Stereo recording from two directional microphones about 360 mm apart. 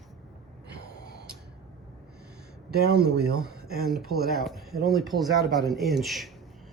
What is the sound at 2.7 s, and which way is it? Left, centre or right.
Speech, right.